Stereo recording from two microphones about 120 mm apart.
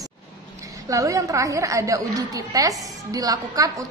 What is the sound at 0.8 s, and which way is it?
A woman's voice, 25° right (ahead or behind).